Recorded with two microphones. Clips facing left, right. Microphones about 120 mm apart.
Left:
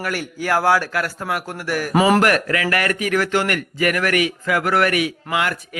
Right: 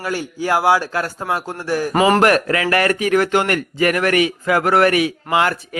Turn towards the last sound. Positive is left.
turn(degrees=-35)  # may be behind; listen again after turning